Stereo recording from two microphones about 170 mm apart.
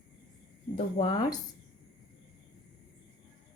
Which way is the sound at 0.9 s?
30° left (ahead or behind).